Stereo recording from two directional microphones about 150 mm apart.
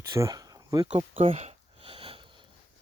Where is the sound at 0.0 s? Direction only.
20° right (ahead or behind).